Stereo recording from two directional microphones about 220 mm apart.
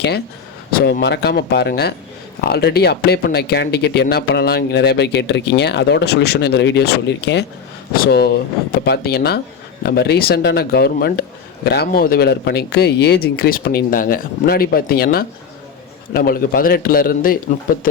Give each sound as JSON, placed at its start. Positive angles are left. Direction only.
{"t": 0.7, "sound": "a man's voice", "side_deg": 45}